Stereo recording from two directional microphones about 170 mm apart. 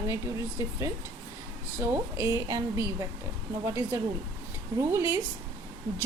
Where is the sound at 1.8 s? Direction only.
15° right (ahead or behind).